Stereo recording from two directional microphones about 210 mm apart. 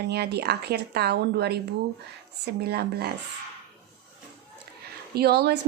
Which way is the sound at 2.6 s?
50° right (ahead or behind).